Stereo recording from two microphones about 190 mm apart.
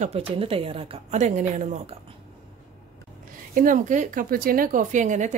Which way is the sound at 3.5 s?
45° right (ahead or behind).